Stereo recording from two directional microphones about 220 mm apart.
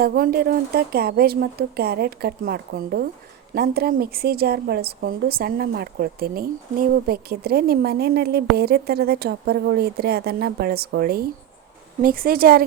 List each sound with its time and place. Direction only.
0.0 s a woman's voice: 45° right (ahead or behind)